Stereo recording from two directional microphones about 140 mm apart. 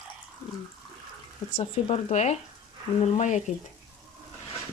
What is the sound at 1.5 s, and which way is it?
Speech, 45° left (ahead or behind).